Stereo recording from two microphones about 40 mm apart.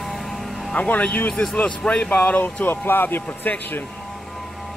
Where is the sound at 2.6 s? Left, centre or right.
Left.